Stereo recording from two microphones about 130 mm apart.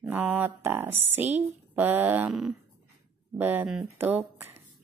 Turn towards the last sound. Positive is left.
turn(degrees=-15)  # may be behind; listen again after turning